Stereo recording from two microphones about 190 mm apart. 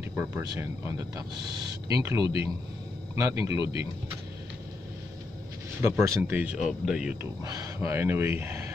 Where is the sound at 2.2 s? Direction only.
30° left (ahead or behind).